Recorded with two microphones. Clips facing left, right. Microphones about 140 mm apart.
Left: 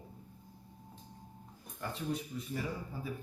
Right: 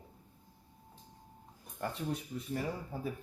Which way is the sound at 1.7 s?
45° right (ahead or behind).